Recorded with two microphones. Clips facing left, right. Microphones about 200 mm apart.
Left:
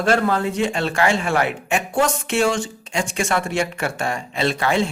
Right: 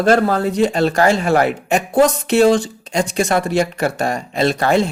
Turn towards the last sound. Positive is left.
turn(degrees=-40)  # may be behind; listen again after turning